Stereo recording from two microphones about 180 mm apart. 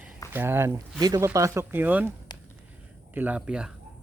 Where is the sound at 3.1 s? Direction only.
10° right (ahead or behind).